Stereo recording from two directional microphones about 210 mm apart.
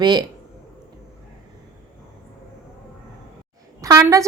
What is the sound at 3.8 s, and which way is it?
Speech, 15° right (ahead or behind).